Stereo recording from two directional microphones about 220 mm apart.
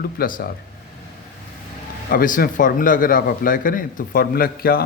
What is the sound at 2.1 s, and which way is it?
A man's voice, 40° left (ahead or behind).